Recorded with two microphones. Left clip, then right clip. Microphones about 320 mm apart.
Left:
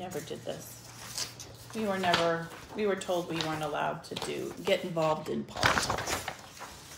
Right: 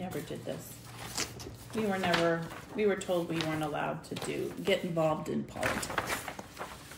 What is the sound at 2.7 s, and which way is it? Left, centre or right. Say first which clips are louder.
Speech: even; centre.